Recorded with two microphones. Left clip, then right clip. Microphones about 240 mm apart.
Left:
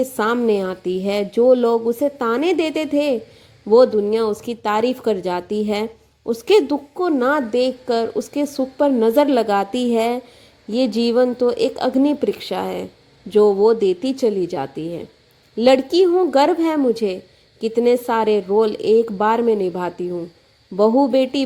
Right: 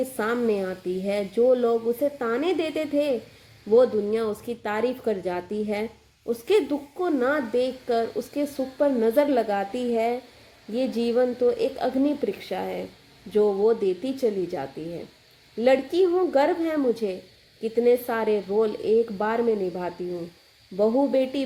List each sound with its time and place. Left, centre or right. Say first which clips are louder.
0.2 s a woman's voice: left 6 dB; left